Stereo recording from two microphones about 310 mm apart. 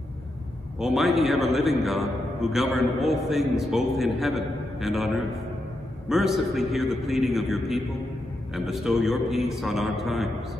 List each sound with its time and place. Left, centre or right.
0.7 s a man's voice: centre